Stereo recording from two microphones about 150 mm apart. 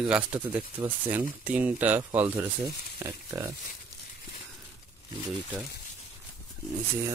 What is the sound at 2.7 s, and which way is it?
Speech, 20° right (ahead or behind).